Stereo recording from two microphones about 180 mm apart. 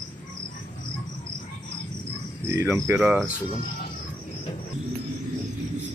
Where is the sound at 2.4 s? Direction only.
10° right (ahead or behind).